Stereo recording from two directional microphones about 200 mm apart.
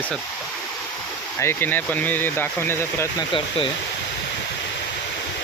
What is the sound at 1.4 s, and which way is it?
Speech, 10° left (ahead or behind).